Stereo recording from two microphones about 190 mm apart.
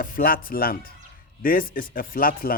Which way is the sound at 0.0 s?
50° left (ahead or behind).